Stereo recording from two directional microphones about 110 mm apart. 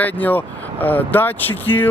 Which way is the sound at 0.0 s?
15° left (ahead or behind).